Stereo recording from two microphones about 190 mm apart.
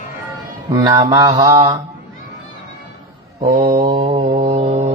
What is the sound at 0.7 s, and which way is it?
Speech, 25° right (ahead or behind).